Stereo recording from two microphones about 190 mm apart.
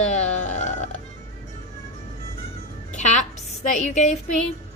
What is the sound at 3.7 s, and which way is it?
Speech, 35° left (ahead or behind).